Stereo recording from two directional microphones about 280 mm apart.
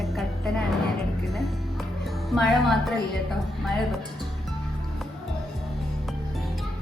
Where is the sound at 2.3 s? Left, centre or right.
Centre.